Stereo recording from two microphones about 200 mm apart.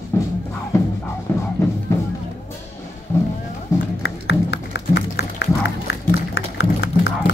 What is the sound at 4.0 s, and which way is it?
Music, 60° left (ahead or behind).